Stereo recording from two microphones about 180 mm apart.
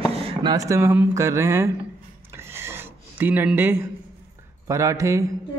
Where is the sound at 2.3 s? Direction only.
15° right (ahead or behind).